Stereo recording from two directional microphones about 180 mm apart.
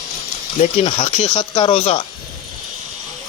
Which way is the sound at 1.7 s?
40° left (ahead or behind).